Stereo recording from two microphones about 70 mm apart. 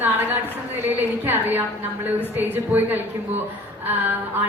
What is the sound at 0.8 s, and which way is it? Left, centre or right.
A woman's voice, right.